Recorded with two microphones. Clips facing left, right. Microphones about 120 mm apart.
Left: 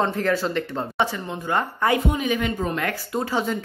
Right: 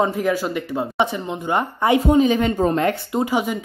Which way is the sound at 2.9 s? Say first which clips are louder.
Right 6 dB; 20° right (ahead or behind).